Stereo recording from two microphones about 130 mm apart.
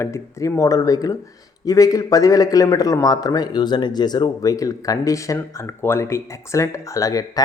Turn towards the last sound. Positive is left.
turn(degrees=25)  # may be behind; listen again after turning